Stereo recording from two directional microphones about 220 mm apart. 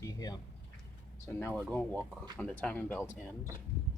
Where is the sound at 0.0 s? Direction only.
15° left (ahead or behind).